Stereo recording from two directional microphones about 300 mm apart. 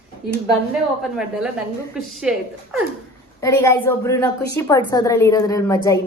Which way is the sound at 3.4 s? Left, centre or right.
Centre.